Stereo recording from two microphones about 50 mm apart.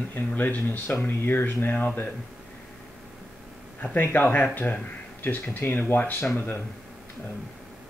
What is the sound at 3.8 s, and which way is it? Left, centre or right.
Speech, left.